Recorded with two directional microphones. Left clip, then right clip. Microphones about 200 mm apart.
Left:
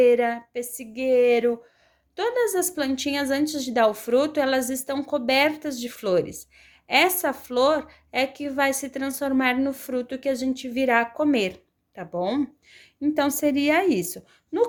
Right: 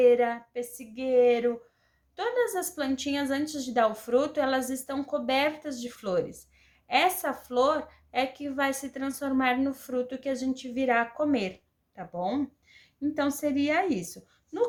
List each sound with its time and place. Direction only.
0.0 s a woman's voice: 40° left (ahead or behind)